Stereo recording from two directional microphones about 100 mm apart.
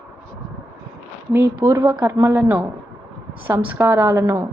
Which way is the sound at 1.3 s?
20° right (ahead or behind).